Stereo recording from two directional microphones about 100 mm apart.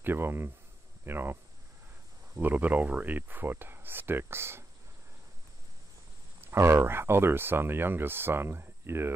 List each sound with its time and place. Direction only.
0.0 s speech: 20° right (ahead or behind)
6.4 s speech: 25° right (ahead or behind)